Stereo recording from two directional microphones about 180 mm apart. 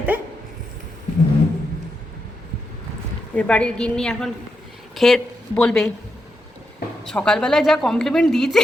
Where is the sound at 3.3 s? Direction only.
5° left (ahead or behind).